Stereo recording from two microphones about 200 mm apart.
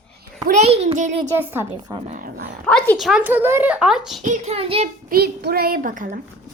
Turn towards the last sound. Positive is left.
turn(degrees=-40)  # may be behind; listen again after turning